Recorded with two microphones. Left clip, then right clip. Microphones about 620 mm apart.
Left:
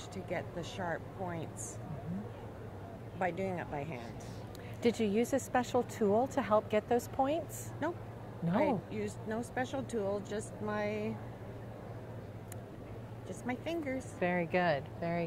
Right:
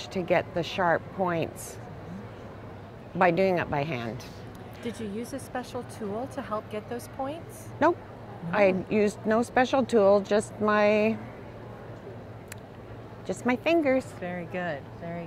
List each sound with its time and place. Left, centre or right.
0.1 s speech: right
3.2 s speech: right
4.8 s speech: left
8.6 s speech: right
9.3 s speech: right
10.1 s speech: right
13.3 s speech: right
14.2 s speech: left